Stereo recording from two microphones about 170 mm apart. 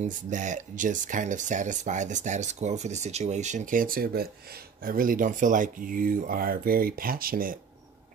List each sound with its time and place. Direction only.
0.3 s speech: 45° right (ahead or behind)